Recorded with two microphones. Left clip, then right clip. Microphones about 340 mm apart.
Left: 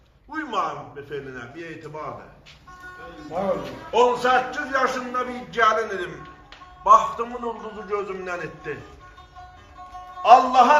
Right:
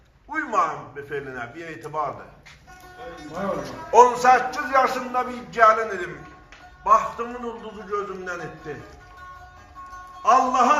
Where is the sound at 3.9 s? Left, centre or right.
Centre.